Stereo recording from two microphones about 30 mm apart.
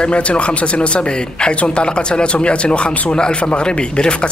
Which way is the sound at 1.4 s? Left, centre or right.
Left.